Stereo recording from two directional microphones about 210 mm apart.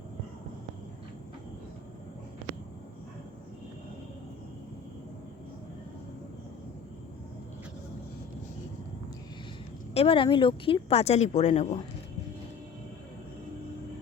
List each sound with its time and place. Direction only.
9.9 s speech: 25° left (ahead or behind)